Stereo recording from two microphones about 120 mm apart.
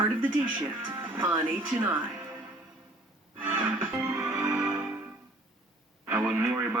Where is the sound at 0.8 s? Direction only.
15° right (ahead or behind).